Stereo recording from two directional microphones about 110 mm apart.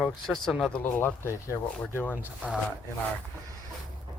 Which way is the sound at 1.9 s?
20° left (ahead or behind).